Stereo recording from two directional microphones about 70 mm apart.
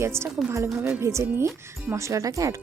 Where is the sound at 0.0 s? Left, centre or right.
Right.